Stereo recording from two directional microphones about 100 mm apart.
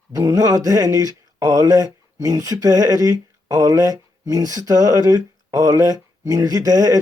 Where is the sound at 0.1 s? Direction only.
40° right (ahead or behind).